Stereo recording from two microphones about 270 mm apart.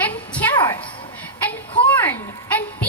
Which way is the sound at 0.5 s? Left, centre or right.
Centre.